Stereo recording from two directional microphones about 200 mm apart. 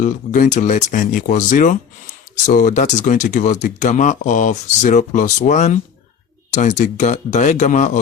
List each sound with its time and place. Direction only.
0.0 s speech: 40° left (ahead or behind)